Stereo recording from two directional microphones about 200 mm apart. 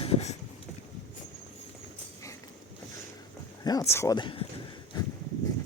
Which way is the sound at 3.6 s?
20° left (ahead or behind).